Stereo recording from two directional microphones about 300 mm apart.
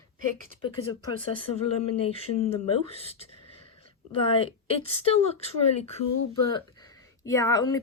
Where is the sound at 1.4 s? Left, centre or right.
Left.